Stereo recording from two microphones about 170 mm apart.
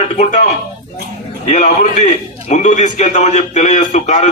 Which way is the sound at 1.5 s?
45° left (ahead or behind).